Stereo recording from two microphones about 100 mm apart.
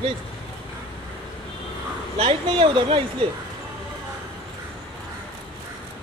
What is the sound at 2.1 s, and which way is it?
Speech, 65° right (ahead or behind).